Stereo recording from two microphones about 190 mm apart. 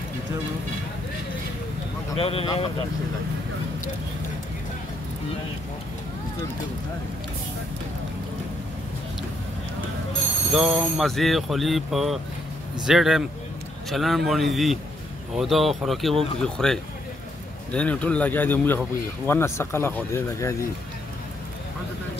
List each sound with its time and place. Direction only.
2.1 s a man's voice: 30° left (ahead or behind)
10.5 s speech: 5° right (ahead or behind); by 20.5 s 15° left (ahead or behind)